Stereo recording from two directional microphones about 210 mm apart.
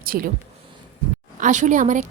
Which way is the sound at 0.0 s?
45° right (ahead or behind).